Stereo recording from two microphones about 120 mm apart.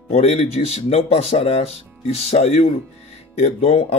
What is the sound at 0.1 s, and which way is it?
Speech, 60° left (ahead or behind).